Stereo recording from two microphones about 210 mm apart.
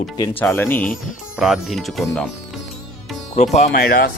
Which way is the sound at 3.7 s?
50° left (ahead or behind).